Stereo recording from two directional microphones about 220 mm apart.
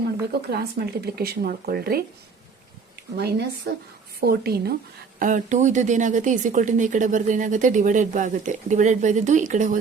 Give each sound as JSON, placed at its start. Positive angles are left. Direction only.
{"t": 0.5, "sound": "speech", "side_deg": -45}
{"t": 5.2, "sound": "speech", "side_deg": -35}